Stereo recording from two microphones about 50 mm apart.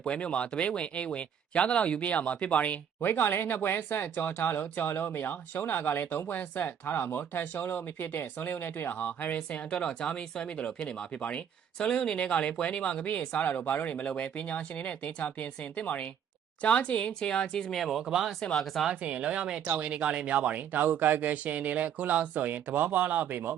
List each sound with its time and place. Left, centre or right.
0.0 s speech: left
3.0 s speech: left
8.9 s speech: left
9.8 s speech: centre
17.7 s speech: centre
18.9 s speech: right